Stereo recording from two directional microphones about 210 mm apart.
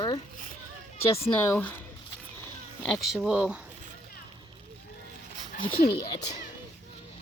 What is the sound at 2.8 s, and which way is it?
Speech, centre (ahead or behind).